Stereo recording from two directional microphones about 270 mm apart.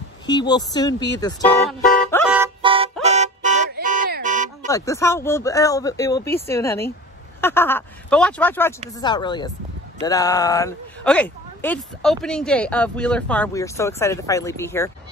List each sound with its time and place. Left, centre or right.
0.3 s speech: centre
1.7 s music: centre
2.2 s music: centre
2.6 s music: centre
4.6 s speech: centre